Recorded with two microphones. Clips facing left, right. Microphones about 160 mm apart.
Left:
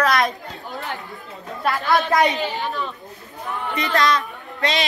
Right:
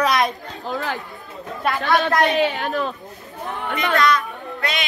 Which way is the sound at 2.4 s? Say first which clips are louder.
Right 4 dB; 70° right (ahead or behind).